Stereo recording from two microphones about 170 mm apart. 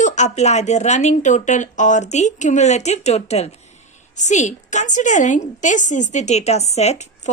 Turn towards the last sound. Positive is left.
turn(degrees=40)  # may be behind; listen again after turning